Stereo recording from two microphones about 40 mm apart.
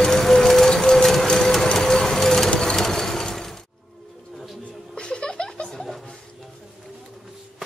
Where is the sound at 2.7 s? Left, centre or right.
Centre.